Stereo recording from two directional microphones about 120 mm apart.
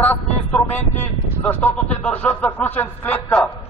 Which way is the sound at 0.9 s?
15° left (ahead or behind).